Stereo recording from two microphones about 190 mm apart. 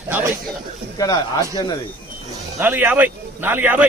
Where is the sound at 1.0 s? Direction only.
20° left (ahead or behind).